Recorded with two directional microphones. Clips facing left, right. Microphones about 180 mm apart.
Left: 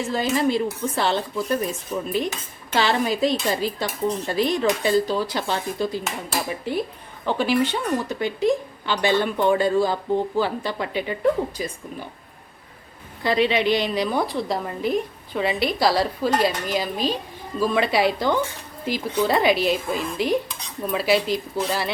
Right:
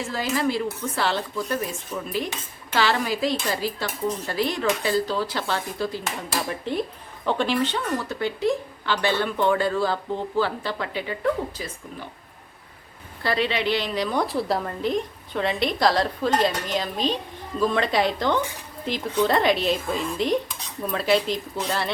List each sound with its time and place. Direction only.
0.0 s speech: 20° left (ahead or behind)
6.1 s speech: 5° left (ahead or behind)
13.2 s speech: 15° left (ahead or behind)
14.3 s speech: centre (ahead or behind)